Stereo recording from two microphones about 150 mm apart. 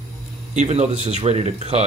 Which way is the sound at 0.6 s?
45° right (ahead or behind).